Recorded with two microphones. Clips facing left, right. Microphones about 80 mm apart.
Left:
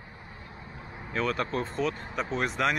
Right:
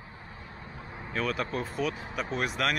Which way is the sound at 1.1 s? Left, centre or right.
Centre.